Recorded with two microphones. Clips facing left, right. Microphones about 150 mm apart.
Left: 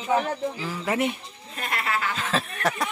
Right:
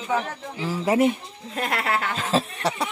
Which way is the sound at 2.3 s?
35° right (ahead or behind).